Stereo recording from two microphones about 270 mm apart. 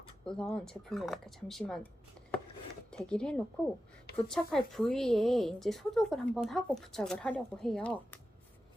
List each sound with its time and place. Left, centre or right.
0.3 s a woman's voice: centre
2.9 s a woman's voice: centre